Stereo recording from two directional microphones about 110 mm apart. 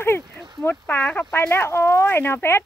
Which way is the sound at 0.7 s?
15° left (ahead or behind).